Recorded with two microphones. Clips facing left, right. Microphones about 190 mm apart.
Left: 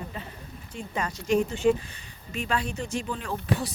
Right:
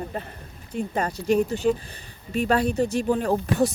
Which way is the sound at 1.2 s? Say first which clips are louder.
Right 1 dB; 35° right (ahead or behind).